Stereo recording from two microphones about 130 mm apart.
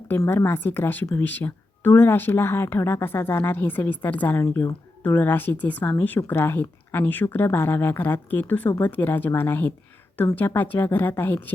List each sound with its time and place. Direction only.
0.1 s a woman's voice: 20° left (ahead or behind)